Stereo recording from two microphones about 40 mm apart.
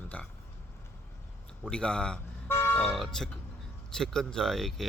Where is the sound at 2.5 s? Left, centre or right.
Left.